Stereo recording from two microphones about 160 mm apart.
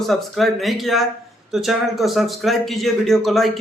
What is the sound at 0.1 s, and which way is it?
Speech, centre (ahead or behind).